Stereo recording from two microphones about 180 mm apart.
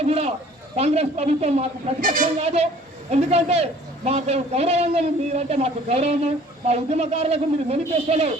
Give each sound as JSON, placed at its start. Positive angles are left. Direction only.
{"t": 0.0, "sound": "a man's voice", "side_deg": -35}